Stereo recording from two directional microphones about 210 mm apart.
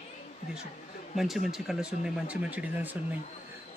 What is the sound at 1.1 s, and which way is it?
Speech, centre (ahead or behind).